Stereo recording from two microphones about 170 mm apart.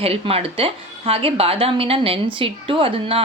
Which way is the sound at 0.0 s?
35° right (ahead or behind).